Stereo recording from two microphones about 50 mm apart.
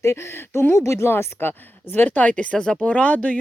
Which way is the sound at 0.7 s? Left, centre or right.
Left.